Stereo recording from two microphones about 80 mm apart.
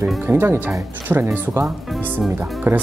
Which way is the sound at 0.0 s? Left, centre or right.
Right.